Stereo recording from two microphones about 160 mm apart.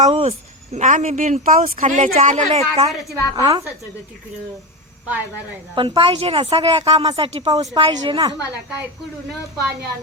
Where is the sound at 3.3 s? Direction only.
25° right (ahead or behind).